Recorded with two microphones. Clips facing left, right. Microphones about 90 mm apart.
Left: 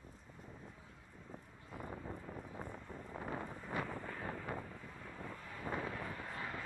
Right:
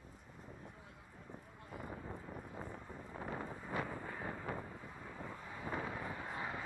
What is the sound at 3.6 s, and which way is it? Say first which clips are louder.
Vehicle: even; 10° right (ahead or behind).